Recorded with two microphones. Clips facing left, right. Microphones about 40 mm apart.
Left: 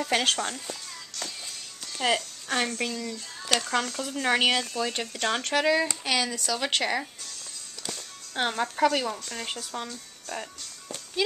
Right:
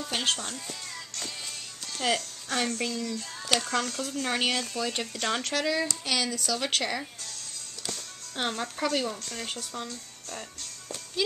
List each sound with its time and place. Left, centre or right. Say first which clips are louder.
0.1 s speech: left 4 dB; left
0.4 s speech: left 5 dB; left
1.9 s speech: left 2 dB; centre; by 4.6 s left
4.7 s speech: left 1 dB; centre
7.8 s music: even; centre
8.9 s speech: left 1 dB; centre